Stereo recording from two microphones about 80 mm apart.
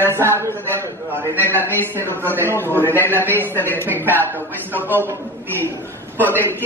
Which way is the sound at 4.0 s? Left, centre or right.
Right.